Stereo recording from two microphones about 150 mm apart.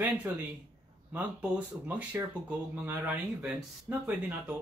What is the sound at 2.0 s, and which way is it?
Speech, 10° right (ahead or behind).